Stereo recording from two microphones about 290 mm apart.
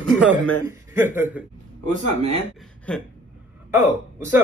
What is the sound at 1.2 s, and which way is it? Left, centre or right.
Speech, centre.